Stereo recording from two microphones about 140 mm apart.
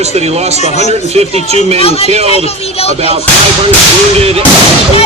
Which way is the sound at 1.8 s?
45° left (ahead or behind).